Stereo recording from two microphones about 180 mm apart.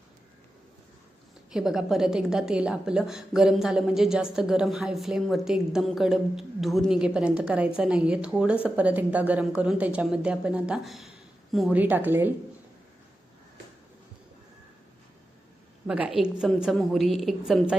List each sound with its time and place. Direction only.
1.5 s a woman's voice: 5° right (ahead or behind)
15.9 s a woman's voice: 5° right (ahead or behind)